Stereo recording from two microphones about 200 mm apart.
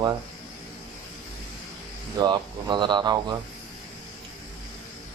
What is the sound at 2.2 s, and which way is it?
Speech, 20° right (ahead or behind).